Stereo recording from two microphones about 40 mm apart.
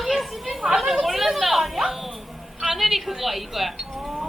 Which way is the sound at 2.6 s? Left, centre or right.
Centre.